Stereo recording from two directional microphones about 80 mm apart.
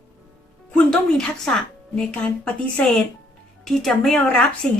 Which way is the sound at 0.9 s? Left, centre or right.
Centre.